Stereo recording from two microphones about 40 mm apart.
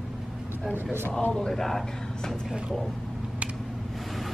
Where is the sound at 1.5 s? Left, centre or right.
Centre.